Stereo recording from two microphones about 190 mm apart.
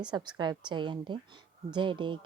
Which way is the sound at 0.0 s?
25° right (ahead or behind).